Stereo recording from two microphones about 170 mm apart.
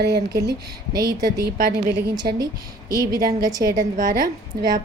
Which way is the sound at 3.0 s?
20° right (ahead or behind).